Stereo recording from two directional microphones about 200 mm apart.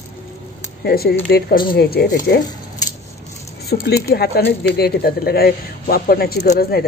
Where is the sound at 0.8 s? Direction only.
50° left (ahead or behind).